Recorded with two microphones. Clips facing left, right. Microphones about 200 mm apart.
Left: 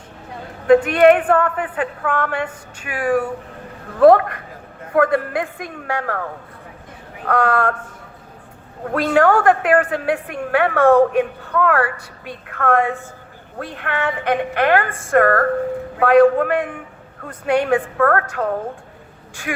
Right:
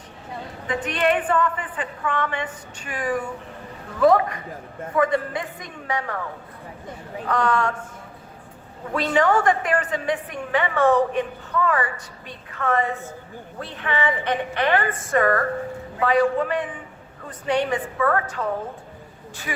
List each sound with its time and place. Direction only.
0.7 s a woman's voice: 60° left (ahead or behind)
7.3 s a woman's voice: 60° left (ahead or behind)
8.8 s a woman's voice: 50° left (ahead or behind)